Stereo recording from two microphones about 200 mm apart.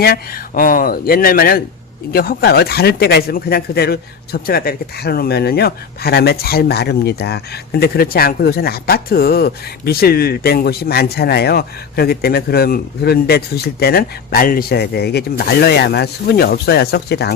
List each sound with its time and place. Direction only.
0.0 s speech: 45° left (ahead or behind)